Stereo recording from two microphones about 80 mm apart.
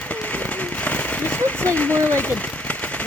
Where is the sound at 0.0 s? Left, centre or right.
Centre.